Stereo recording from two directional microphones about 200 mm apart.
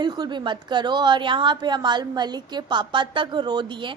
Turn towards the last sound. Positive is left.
turn(degrees=-20)  # may be behind; listen again after turning